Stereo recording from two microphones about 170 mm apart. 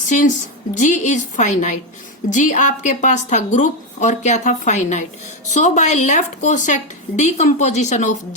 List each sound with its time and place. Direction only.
0.1 s speech: 50° left (ahead or behind)